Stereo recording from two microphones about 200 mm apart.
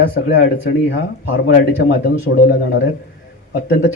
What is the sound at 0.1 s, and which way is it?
A man's voice, 55° left (ahead or behind).